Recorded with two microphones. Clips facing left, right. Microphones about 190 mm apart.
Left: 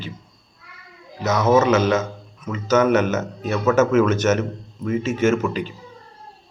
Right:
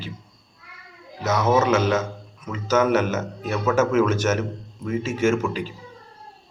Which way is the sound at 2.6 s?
10° right (ahead or behind).